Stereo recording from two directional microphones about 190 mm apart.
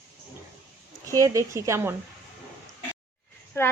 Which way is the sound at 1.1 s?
15° right (ahead or behind).